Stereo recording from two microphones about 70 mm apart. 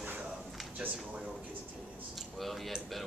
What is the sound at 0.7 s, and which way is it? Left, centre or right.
Speech, centre.